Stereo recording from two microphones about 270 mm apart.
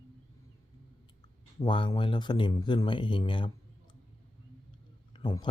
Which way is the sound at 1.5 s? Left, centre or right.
Centre.